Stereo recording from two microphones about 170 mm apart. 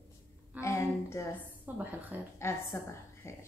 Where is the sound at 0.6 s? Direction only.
15° left (ahead or behind).